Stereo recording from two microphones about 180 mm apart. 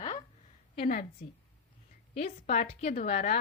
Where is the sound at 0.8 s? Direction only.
55° left (ahead or behind).